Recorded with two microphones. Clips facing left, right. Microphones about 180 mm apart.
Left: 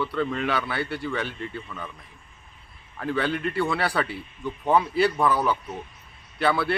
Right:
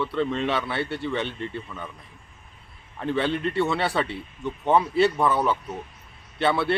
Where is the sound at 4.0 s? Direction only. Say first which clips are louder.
Right 1 dB; centre (ahead or behind).